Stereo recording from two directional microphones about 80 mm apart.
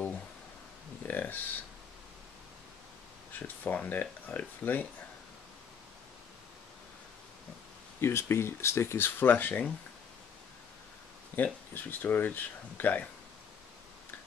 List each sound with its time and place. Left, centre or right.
1.0 s a sound: left
3.3 s speech: left
8.0 s speech: left
11.3 s speech: left